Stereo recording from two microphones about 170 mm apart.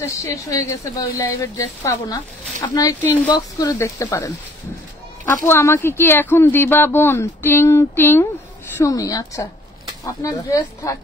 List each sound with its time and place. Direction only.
0.0 s speech: 15° left (ahead or behind)